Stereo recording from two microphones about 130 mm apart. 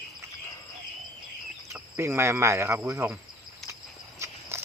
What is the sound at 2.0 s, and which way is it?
Cricket, 20° right (ahead or behind).